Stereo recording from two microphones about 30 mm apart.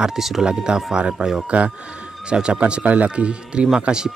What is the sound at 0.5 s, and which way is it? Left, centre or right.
Speech, right.